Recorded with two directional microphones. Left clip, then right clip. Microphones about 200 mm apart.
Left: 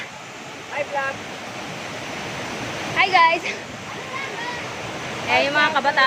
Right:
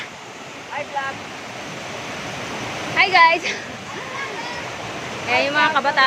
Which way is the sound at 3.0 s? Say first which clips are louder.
Right 2 dB; 10° right (ahead or behind).